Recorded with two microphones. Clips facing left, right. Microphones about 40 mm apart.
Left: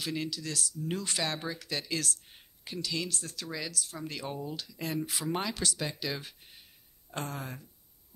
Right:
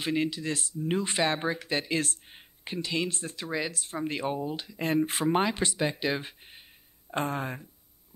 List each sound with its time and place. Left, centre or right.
0.0 s speech: right